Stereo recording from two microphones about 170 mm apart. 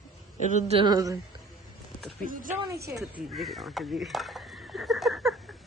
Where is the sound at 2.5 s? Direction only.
15° right (ahead or behind).